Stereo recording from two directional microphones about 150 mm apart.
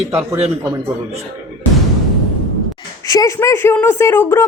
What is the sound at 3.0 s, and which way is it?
A woman's voice, 20° left (ahead or behind).